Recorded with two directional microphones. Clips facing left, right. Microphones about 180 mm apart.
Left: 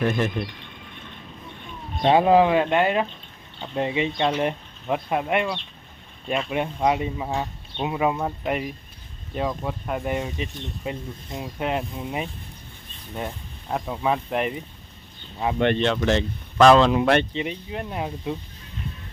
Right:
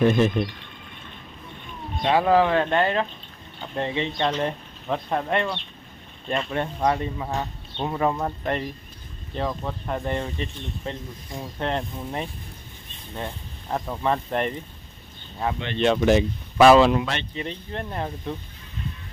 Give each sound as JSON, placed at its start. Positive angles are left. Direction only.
{"t": 0.0, "sound": "speech", "side_deg": -20}
{"t": 2.0, "sound": "speech", "side_deg": 20}
{"t": 15.5, "sound": "speech", "side_deg": 50}
{"t": 15.8, "sound": "speech", "side_deg": -15}
{"t": 17.3, "sound": "speech", "side_deg": 10}